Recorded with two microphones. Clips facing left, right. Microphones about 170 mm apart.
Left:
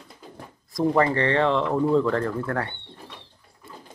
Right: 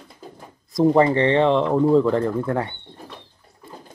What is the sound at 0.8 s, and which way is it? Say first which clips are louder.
Speech: right 5 dB; 20° right (ahead or behind).